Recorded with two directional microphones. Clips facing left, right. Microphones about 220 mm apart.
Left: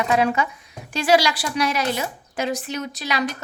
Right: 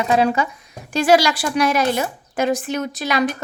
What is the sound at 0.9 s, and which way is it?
A woman's voice, 45° right (ahead or behind).